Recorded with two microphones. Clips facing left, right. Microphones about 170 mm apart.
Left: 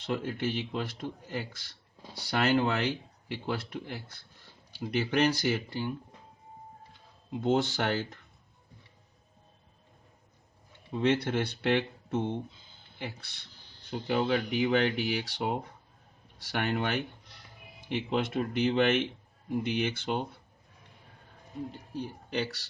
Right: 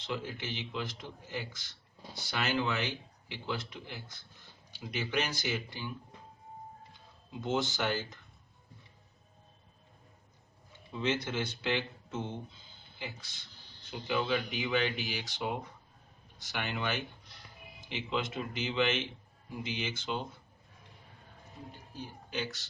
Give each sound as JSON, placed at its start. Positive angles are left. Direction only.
{"t": 0.0, "sound": "speech", "side_deg": 55}
{"t": 7.4, "sound": "speech", "side_deg": 60}
{"t": 10.9, "sound": "speech", "side_deg": 60}
{"t": 21.9, "sound": "speech", "side_deg": 65}